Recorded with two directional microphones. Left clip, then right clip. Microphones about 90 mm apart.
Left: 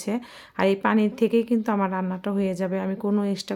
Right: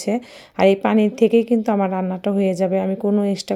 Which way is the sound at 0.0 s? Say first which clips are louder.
Right 7 dB; 30° right (ahead or behind).